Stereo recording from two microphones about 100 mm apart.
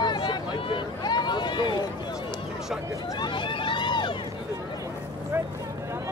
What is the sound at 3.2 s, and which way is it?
Vehicle, 55° left (ahead or behind).